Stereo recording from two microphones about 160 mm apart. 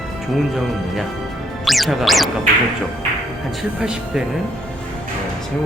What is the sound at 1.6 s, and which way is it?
Music, centre (ahead or behind).